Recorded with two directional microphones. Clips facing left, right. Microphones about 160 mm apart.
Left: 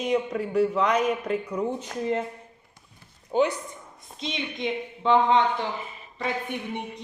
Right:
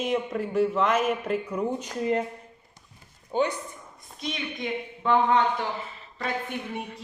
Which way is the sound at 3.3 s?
10° left (ahead or behind).